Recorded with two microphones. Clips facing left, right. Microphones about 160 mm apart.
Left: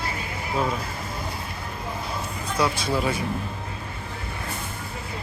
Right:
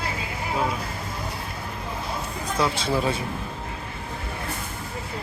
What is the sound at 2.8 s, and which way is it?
Speech, 30° right (ahead or behind).